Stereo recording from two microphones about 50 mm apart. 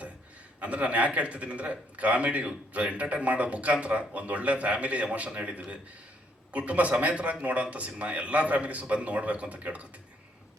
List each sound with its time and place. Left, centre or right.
0.6 s a man's voice: right